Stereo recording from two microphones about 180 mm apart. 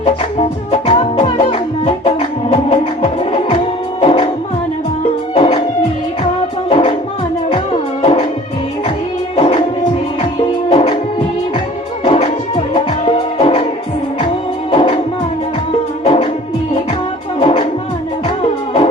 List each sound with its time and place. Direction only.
0.0 s music: 30° left (ahead or behind)
5.3 s music: 30° left (ahead or behind)
6.7 s music: 30° left (ahead or behind)
8.0 s music: 30° left (ahead or behind)
9.3 s music: 30° left (ahead or behind)
10.7 s music: 35° left (ahead or behind)
12.0 s music: 35° left (ahead or behind)
14.7 s music: 30° left (ahead or behind)
16.0 s music: 30° left (ahead or behind)
17.4 s music: 30° left (ahead or behind)